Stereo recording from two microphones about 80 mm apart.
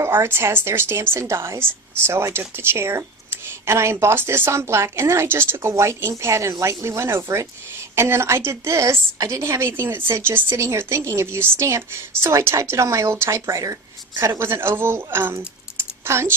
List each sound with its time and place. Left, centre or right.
0.0 s a woman's voice: right
14.2 s a woman's voice: right
15.8 s typing: right